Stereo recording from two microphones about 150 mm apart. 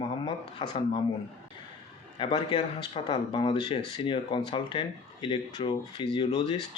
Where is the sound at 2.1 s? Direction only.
30° left (ahead or behind).